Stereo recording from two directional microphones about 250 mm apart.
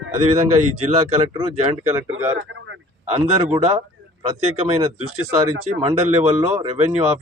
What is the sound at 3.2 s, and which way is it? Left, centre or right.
Speech, right.